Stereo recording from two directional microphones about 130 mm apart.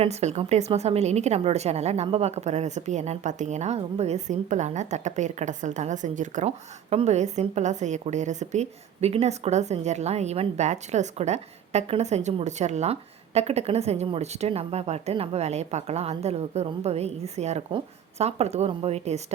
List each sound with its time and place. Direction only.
0.0 s a woman's voice: 55° right (ahead or behind); by 6.5 s 75° right (ahead or behind)
6.9 s a woman's voice: 55° right (ahead or behind)